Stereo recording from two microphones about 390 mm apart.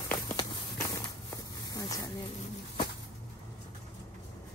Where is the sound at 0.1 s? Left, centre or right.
Centre.